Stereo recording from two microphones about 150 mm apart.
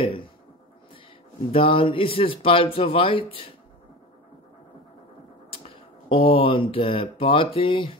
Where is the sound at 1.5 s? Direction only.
35° left (ahead or behind).